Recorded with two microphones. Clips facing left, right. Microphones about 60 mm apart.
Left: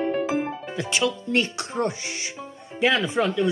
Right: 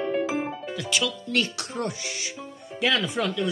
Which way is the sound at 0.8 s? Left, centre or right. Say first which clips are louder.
Left 4 dB; left.